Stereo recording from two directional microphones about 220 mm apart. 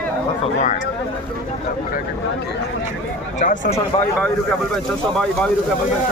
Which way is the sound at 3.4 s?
35° left (ahead or behind).